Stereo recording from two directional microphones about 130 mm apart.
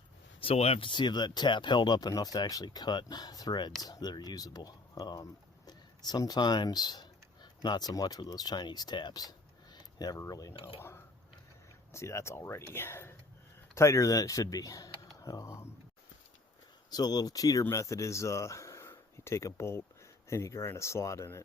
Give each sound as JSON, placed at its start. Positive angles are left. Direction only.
{"t": 0.3, "sound": "speech", "side_deg": 50}
{"t": 16.9, "sound": "speech", "side_deg": 30}